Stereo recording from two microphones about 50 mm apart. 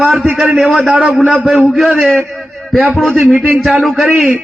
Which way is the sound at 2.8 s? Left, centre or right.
Right.